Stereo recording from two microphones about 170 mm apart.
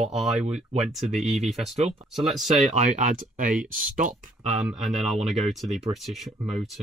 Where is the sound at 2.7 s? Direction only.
45° right (ahead or behind).